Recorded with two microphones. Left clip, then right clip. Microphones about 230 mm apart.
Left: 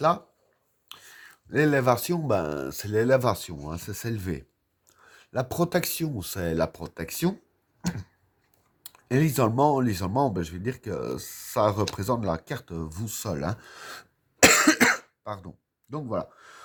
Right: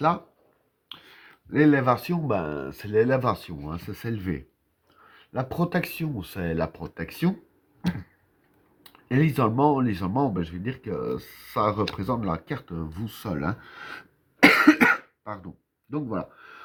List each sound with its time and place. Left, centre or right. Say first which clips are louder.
0.9 s speech: right 1 dB; left
9.0 s speech: even; left